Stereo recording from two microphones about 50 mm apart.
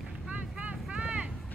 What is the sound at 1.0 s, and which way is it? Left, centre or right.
Vehicle, right.